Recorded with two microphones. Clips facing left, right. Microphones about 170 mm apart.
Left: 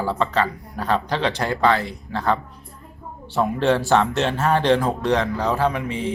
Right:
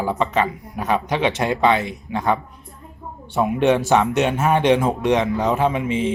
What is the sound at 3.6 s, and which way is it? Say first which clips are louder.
Speech: right 2 dB; 20° right (ahead or behind).